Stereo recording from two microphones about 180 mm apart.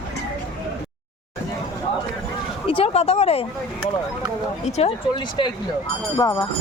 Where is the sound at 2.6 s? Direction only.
30° left (ahead or behind).